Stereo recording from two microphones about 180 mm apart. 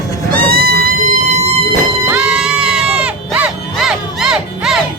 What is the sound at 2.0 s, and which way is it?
Sheep, 5° right (ahead or behind).